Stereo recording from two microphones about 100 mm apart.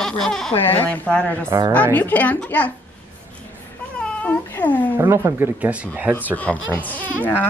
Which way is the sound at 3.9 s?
10° left (ahead or behind).